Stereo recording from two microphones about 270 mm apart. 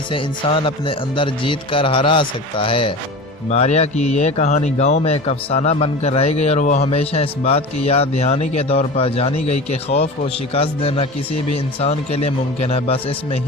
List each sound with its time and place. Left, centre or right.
0.1 s a man's voice: centre
10.5 s a man's voice: left